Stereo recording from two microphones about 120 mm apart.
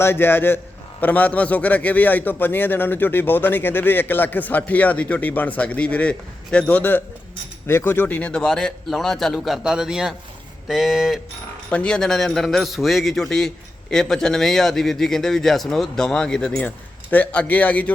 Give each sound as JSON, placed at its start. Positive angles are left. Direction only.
{"t": 0.0, "sound": "a man's voice", "side_deg": 20}
{"t": 11.7, "sound": "a man's voice", "side_deg": 10}